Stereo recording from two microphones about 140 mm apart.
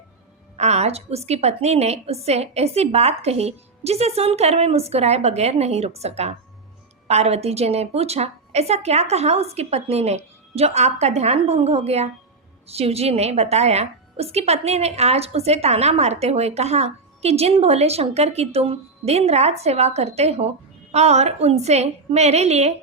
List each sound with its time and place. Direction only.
0.5 s a woman's voice: 50° right (ahead or behind)